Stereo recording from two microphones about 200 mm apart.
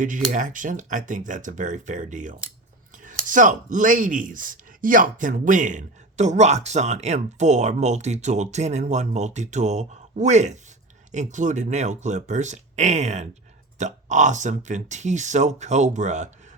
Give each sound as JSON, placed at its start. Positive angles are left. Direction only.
{"t": 0.0, "sound": "speech", "side_deg": -40}